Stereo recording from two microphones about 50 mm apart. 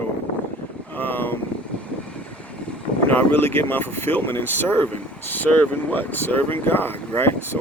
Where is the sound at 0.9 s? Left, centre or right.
Left.